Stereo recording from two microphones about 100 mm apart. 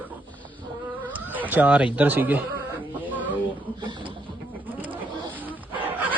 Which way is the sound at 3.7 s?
50° right (ahead or behind).